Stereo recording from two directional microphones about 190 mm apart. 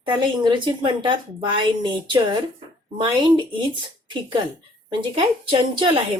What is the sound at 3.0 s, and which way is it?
Speech, 25° right (ahead or behind).